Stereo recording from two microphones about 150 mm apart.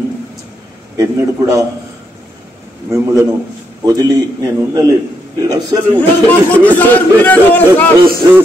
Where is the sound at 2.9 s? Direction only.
20° right (ahead or behind).